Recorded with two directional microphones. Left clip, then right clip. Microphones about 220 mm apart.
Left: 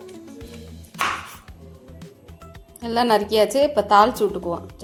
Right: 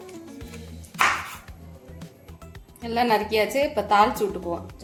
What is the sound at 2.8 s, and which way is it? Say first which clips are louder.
A woman's voice: left 3 dB; 30° left (ahead or behind).